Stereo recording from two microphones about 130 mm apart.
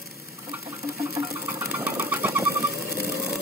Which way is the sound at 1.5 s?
20° right (ahead or behind).